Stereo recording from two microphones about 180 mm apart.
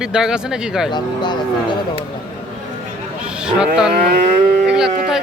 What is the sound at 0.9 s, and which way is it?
Speech, 25° left (ahead or behind).